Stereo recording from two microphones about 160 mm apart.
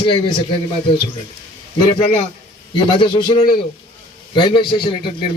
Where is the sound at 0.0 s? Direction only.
30° left (ahead or behind).